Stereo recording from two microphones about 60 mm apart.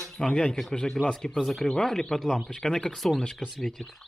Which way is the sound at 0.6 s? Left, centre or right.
Centre.